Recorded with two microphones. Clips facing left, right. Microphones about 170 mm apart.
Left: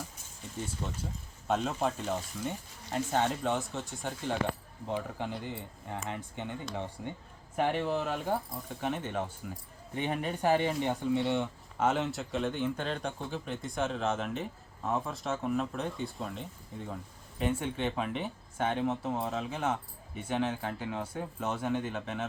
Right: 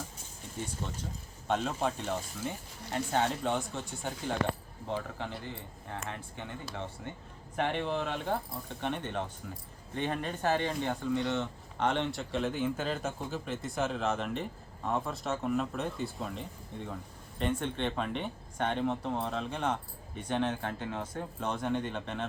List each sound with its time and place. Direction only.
0.8 s speech: 5° left (ahead or behind)
4.9 s speech: 15° left (ahead or behind)
11.2 s speech: 5° left (ahead or behind)